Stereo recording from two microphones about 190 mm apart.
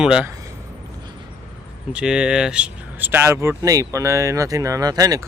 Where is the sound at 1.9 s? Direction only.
5° right (ahead or behind).